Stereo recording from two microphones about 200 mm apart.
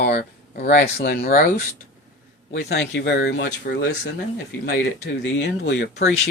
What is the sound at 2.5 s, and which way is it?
Speech, 60° left (ahead or behind).